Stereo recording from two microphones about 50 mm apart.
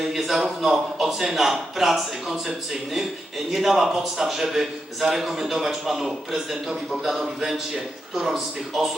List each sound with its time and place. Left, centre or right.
0.0 s a man's voice: centre